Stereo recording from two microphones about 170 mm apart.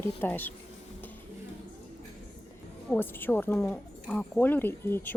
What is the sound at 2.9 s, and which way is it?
A woman's voice, 10° left (ahead or behind).